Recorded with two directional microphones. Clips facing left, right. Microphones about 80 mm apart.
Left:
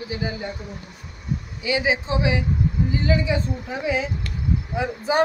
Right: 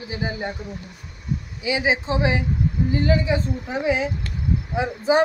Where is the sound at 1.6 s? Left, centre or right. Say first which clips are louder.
Even; right.